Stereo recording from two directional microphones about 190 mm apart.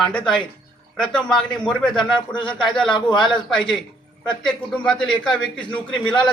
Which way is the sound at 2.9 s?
25° left (ahead or behind).